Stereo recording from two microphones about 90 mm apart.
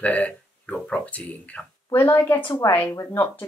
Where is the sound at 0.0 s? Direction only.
15° left (ahead or behind).